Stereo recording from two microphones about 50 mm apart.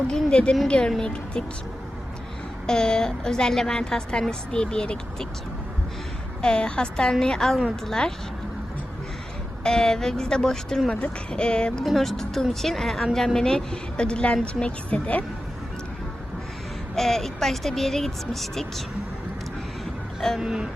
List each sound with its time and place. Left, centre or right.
0.1 s a woman's voice: centre
2.6 s a woman's voice: centre
6.4 s a woman's voice: centre
9.6 s a woman's voice: centre
11.9 s a woman's voice: centre; by 15.2 s left
16.9 s speech: centre
20.4 s a sound: centre